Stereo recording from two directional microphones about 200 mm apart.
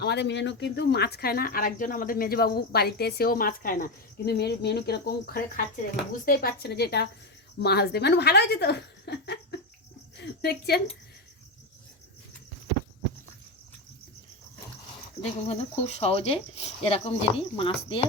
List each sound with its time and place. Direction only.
0.0 s speech: 55° left (ahead or behind)
15.2 s speech: 30° left (ahead or behind)